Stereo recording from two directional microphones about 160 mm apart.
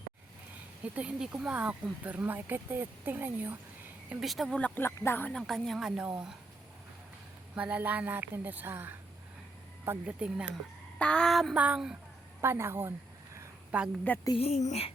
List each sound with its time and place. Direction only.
0.9 s speech: 5° right (ahead or behind)
4.1 s speech: centre (ahead or behind)
7.5 s speech: 10° right (ahead or behind)
10.9 s speech: 5° left (ahead or behind)
11.5 s speech: 10° right (ahead or behind)
13.3 s a sound: 10° right (ahead or behind)
14.3 s speech: 40° left (ahead or behind)